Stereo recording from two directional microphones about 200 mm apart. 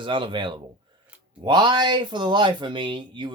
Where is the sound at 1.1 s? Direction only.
5° right (ahead or behind).